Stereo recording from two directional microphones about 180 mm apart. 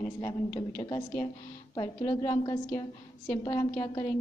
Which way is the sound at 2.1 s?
20° left (ahead or behind).